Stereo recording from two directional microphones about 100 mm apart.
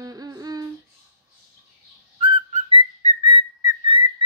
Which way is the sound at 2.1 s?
60° right (ahead or behind).